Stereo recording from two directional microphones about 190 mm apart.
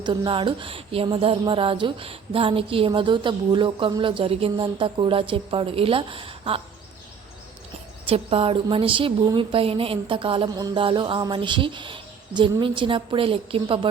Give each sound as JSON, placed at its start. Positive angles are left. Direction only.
{"t": 0.0, "sound": "speech", "side_deg": -25}
{"t": 8.0, "sound": "speech", "side_deg": -30}